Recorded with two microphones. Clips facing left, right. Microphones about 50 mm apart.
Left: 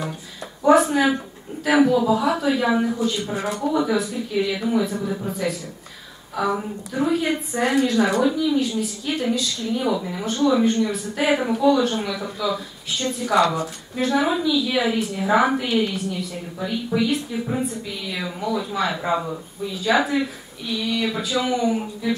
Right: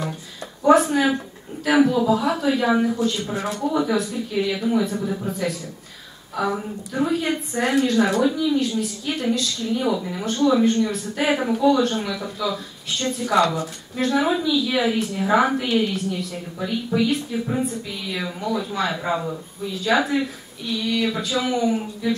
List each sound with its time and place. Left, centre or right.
0.7 s a woman's voice: centre